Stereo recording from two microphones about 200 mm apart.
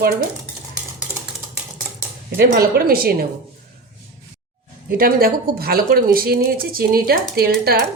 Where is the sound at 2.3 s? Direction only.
50° right (ahead or behind).